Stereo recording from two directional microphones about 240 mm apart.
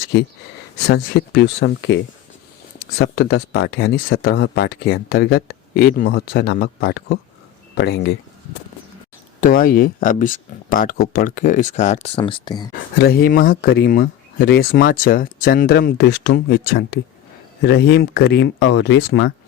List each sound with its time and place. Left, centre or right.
0.9 s speech: left
4.1 s speech: left
9.4 s speech: left; by 12.7 s centre
13.0 s speech: left